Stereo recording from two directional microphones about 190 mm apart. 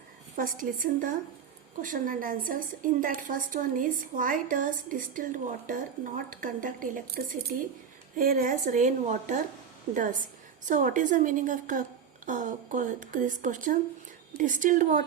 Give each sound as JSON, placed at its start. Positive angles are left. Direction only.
{"t": 0.3, "sound": "a woman's voice", "side_deg": -45}